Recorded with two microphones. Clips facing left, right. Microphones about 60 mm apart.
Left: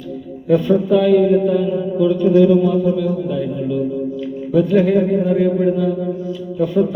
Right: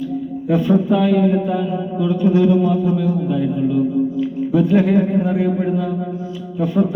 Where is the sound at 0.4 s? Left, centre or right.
Right.